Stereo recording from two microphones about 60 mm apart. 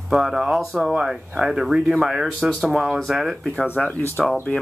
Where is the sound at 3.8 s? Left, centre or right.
Centre.